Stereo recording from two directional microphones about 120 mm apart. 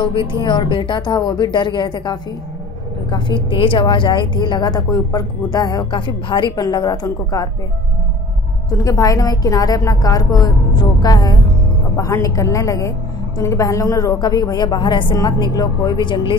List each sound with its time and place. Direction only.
0.0 s a woman's voice: 45° left (ahead or behind)
8.6 s a woman's voice: 30° left (ahead or behind)